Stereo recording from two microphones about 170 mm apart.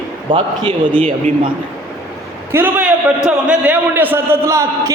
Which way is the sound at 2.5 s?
10° right (ahead or behind).